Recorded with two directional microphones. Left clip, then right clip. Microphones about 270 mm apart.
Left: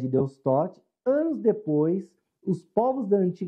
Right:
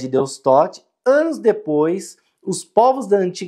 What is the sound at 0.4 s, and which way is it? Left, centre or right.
Speech, right.